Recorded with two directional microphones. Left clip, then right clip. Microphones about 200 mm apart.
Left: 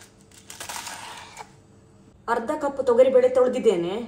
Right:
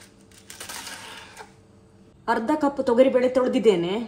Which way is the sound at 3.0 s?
70° right (ahead or behind).